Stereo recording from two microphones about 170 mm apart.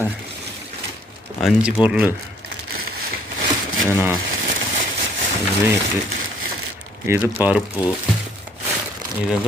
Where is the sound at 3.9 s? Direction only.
10° right (ahead or behind).